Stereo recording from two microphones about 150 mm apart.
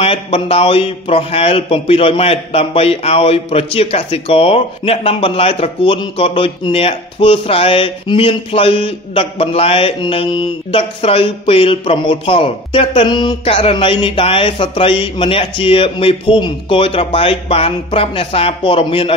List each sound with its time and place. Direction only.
0.0 s a man's voice: 40° left (ahead or behind)